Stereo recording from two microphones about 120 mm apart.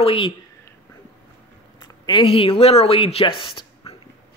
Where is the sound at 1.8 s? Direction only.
40° left (ahead or behind).